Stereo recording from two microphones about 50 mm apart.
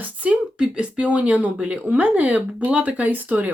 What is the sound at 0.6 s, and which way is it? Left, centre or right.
Speech, right.